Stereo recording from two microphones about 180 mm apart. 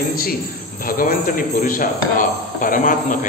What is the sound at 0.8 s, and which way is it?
A man's voice, 50° left (ahead or behind).